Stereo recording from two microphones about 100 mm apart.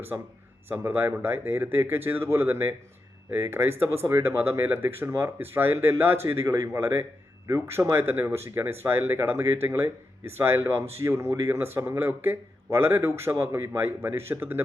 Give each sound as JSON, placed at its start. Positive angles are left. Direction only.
{"t": 0.7, "sound": "speech", "side_deg": -25}